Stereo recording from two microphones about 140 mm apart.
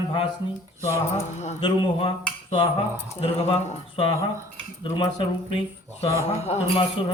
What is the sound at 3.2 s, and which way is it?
A man's voice, 50° left (ahead or behind).